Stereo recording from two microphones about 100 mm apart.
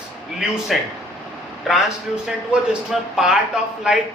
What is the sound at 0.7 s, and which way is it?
A man's voice, centre (ahead or behind).